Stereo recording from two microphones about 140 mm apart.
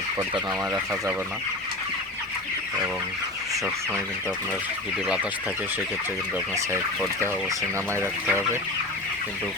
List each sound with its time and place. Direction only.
0.2 s speech: 25° right (ahead or behind)
7.9 s speech: 15° right (ahead or behind)